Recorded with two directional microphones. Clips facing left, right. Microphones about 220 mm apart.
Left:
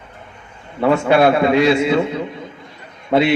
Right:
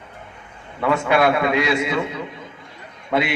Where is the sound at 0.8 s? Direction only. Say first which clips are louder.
Left 5 dB; 30° left (ahead or behind).